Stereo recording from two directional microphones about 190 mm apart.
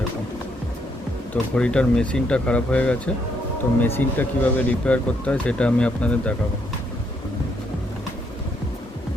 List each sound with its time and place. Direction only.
1.3 s speech: 5° left (ahead or behind)